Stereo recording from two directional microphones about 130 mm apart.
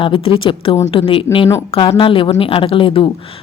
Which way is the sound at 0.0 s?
45° left (ahead or behind).